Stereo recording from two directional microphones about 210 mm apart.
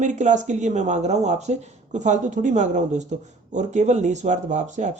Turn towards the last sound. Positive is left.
turn(degrees=-35)  # may be behind; listen again after turning